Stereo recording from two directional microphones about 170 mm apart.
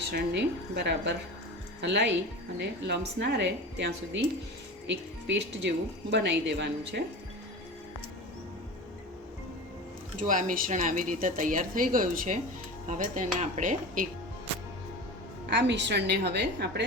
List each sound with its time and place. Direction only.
0.1 s a woman's voice: 80° right
10.2 s speech: 50° right (ahead or behind)
15.4 s a woman's voice: 90° right